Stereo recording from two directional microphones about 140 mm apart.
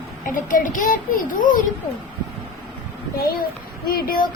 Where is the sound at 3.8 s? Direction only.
90° left.